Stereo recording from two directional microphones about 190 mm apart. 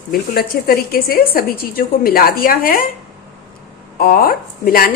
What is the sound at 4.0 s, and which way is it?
Speech, 50° left (ahead or behind).